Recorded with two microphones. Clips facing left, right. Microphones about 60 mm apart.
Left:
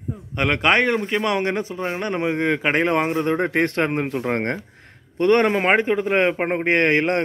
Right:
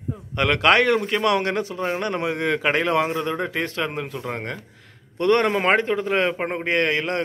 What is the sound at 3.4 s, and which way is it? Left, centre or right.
Speech, left.